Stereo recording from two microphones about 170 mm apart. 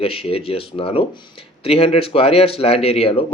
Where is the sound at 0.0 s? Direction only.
35° left (ahead or behind).